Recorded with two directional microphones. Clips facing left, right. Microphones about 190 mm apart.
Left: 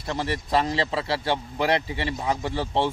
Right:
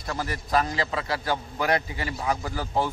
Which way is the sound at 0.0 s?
25° left (ahead or behind).